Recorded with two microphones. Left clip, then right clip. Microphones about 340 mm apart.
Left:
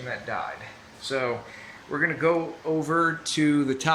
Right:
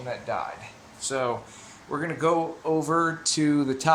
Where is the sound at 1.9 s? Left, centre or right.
Centre.